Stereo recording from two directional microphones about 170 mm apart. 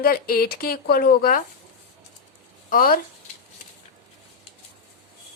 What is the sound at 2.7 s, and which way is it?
Speech, 60° left (ahead or behind).